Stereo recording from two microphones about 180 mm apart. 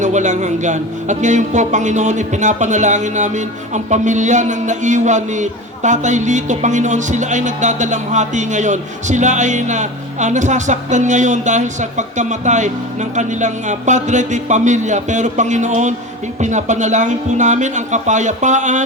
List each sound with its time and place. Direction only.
0.0 s a man's voice: 40° right (ahead or behind)